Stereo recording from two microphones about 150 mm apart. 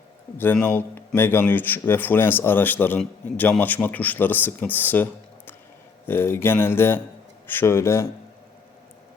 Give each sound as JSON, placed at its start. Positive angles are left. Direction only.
{"t": 0.3, "sound": "speech", "side_deg": 15}
{"t": 6.1, "sound": "speech", "side_deg": 15}